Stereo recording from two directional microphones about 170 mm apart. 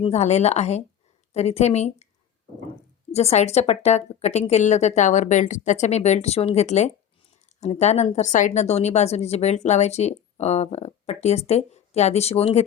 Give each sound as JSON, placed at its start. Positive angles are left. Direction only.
{"t": 0.0, "sound": "speech", "side_deg": 40}
{"t": 3.1, "sound": "speech", "side_deg": 40}